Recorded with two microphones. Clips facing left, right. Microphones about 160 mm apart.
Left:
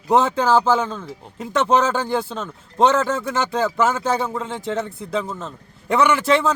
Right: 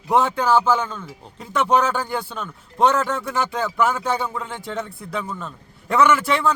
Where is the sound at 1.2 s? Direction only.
20° left (ahead or behind).